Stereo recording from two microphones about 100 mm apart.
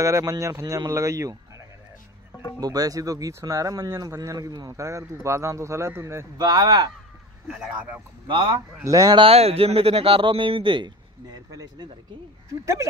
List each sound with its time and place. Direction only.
0.0 s speech: 30° right (ahead or behind)
2.6 s speech: 40° right (ahead or behind)
6.3 s speech: 40° right (ahead or behind)
7.4 s speech: 5° right (ahead or behind)
8.3 s speech: 55° right (ahead or behind)
8.8 s speech: 35° right (ahead or behind)
9.1 s speech: 75° right (ahead or behind); by 10.9 s 55° right (ahead or behind)
11.3 s speech: 40° right (ahead or behind)